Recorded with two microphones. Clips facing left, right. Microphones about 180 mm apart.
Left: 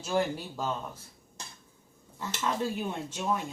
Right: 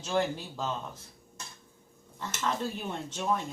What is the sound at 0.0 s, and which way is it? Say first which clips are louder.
Speech: left 1 dB; 10° left (ahead or behind).